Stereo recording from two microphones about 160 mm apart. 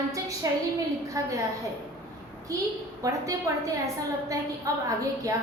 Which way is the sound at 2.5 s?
20° right (ahead or behind).